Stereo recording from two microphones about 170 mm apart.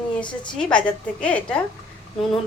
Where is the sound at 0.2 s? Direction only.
30° left (ahead or behind).